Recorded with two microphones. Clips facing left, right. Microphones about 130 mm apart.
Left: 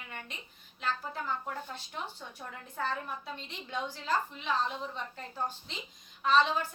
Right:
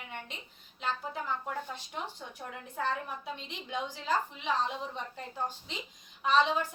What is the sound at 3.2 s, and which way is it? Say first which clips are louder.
A woman's voice: right 2 dB; 15° right (ahead or behind).